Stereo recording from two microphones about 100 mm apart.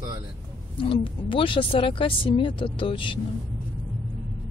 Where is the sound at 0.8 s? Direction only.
60° left (ahead or behind).